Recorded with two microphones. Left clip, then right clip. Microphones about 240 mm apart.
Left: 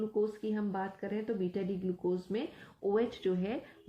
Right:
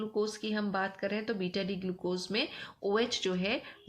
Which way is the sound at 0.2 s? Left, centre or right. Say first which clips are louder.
Right 1 dB; right.